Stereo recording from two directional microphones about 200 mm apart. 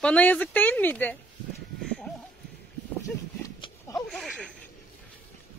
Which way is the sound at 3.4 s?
15° left (ahead or behind).